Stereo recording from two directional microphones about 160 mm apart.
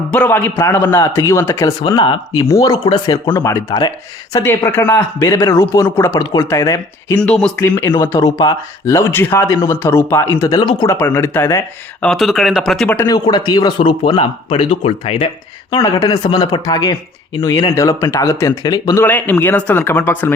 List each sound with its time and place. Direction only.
0.1 s speech: 10° left (ahead or behind)
1.9 s speech: 30° left (ahead or behind)
7.2 s speech: 5° left (ahead or behind)
7.6 s speech: 15° left (ahead or behind)
12.0 s speech: centre (ahead or behind)
13.0 s speech: 25° left (ahead or behind)
15.7 s speech: 25° left (ahead or behind)
19.0 s speech: 10° left (ahead or behind)